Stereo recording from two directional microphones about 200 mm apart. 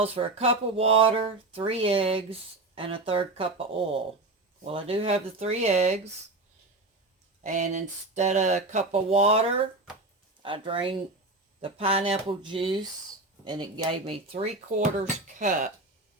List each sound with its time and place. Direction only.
0.0 s speech: 30° right (ahead or behind)
7.4 s speech: 40° right (ahead or behind)
14.9 s speech: 40° right (ahead or behind)